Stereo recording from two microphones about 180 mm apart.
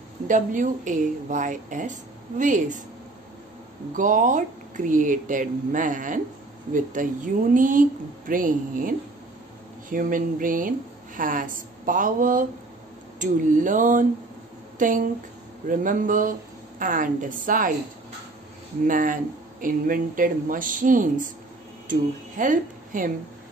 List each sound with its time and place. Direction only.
0.3 s a woman's voice: 45° right (ahead or behind)
3.9 s a woman's voice: 45° right (ahead or behind)
18.9 s a woman's voice: 50° right (ahead or behind)